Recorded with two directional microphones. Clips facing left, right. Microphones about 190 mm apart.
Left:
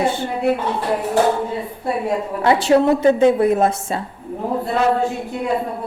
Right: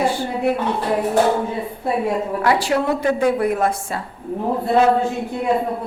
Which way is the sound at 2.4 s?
25° left (ahead or behind).